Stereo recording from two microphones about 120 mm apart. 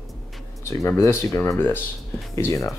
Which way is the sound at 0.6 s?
25° left (ahead or behind).